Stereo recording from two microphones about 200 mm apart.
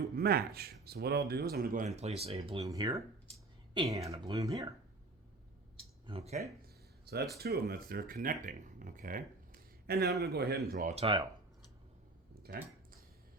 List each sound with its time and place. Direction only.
0.2 s speech: 50° right (ahead or behind); by 2.6 s 30° right (ahead or behind)
2.6 s speech: 15° right (ahead or behind)
6.1 s speech: 30° right (ahead or behind)
6.4 s a sound: 50° right (ahead or behind)
7.3 s speech: 50° right (ahead or behind)
10.7 s speech: 35° right (ahead or behind)
12.3 s a sound: 50° right (ahead or behind)